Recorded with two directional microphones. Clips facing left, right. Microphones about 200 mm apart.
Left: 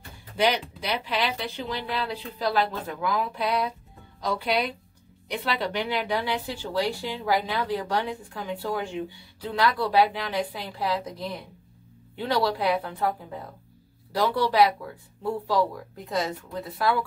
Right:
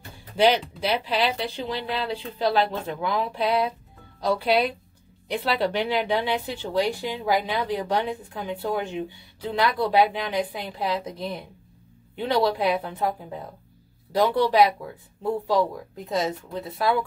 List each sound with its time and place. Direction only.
0.4 s speech: 30° right (ahead or behind)